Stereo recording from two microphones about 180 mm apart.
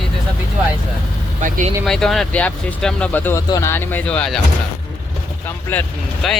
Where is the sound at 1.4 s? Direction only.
45° right (ahead or behind).